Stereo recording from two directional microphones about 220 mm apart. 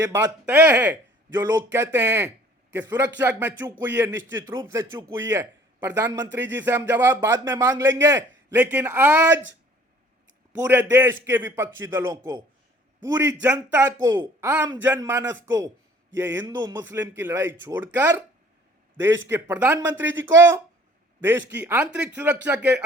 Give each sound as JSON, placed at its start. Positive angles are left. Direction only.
{"t": 0.0, "sound": "a man's voice", "side_deg": -10}
{"t": 10.7, "sound": "a man's voice", "side_deg": -10}